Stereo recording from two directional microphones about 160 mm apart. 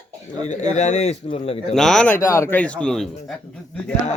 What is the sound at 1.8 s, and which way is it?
Speech, 5° left (ahead or behind).